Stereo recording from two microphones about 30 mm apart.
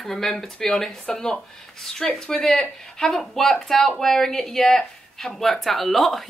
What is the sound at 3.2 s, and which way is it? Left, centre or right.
A woman's voice, centre.